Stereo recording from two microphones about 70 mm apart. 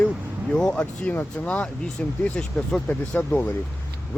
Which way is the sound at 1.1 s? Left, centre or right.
Left.